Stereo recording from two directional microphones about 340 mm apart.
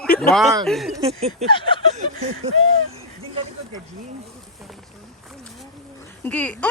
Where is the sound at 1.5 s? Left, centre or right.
Centre.